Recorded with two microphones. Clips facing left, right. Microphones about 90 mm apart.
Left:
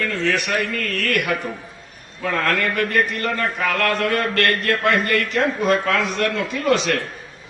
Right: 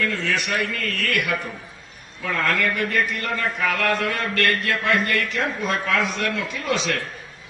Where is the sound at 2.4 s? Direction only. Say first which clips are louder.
Left 1 dB; 50° left (ahead or behind).